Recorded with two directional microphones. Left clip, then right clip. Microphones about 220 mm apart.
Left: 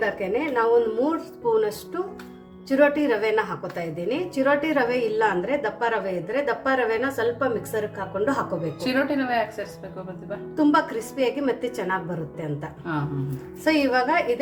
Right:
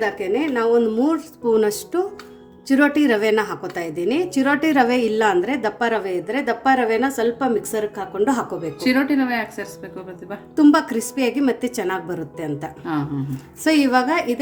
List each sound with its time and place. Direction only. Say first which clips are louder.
0.0 s a woman's voice: right 3 dB; 55° right (ahead or behind)
8.8 s speech: right 5 dB; 30° right (ahead or behind)
10.5 s a woman's voice: right 5 dB; 55° right (ahead or behind)
13.7 s a woman's voice: right 3 dB; 55° right (ahead or behind)